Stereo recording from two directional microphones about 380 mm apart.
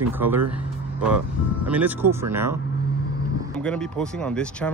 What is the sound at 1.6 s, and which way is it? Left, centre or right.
Speech, centre.